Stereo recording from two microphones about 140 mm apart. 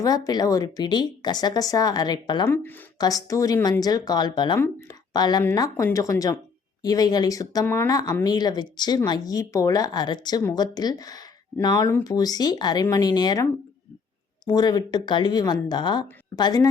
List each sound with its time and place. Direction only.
0.0 s speech: 25° left (ahead or behind)
2.5 s speech: 15° left (ahead or behind)
3.0 s speech: 25° left (ahead or behind)